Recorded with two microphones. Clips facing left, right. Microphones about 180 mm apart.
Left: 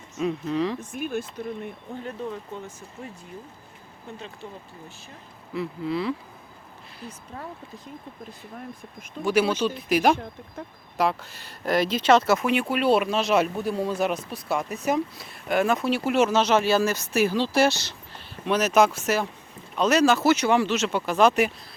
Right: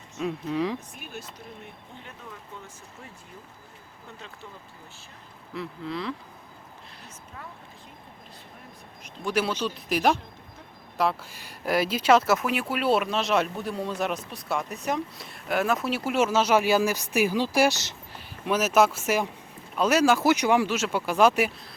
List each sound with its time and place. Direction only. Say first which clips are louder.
0.2 s speech: left 2 dB; 5° right (ahead or behind)
0.8 s speech: left 12 dB; 50° left (ahead or behind)
5.5 s speech: left 5 dB; 5° left (ahead or behind)
9.2 s speech: left 5 dB; centre (ahead or behind)